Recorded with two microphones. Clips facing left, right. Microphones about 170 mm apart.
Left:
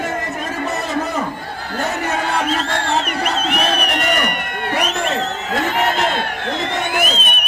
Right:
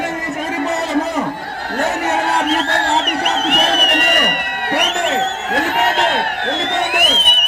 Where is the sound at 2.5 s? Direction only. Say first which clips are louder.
Right 3 dB; 65° right (ahead or behind).